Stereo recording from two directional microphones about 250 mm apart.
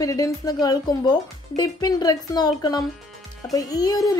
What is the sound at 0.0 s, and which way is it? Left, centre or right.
Speech, centre.